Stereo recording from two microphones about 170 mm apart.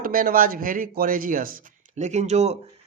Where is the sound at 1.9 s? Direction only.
45° right (ahead or behind).